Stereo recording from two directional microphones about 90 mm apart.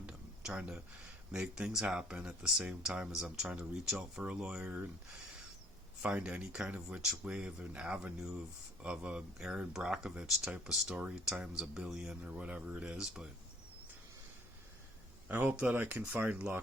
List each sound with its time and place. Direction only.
0.0 s a sound: 10° right (ahead or behind)
1.3 s speech: 10° right (ahead or behind)
6.0 s speech: 15° right (ahead or behind)
15.3 s speech: 20° right (ahead or behind)